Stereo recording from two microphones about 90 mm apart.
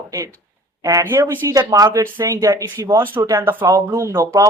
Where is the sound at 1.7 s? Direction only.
40° right (ahead or behind).